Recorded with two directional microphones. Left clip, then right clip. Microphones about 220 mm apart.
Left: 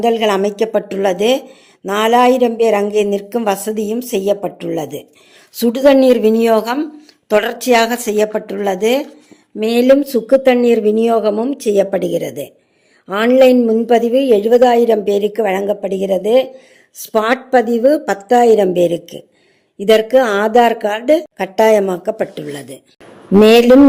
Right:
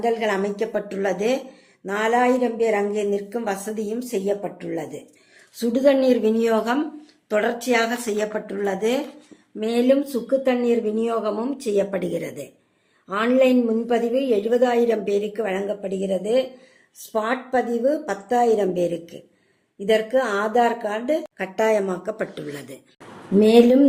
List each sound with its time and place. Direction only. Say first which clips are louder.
0.0 s a woman's voice: left 8 dB; 40° left (ahead or behind); by 12.5 s 25° left (ahead or behind)
13.1 s a woman's voice: left 9 dB; 35° left (ahead or behind)
23.4 s a woman's voice: left 7 dB; 45° left (ahead or behind)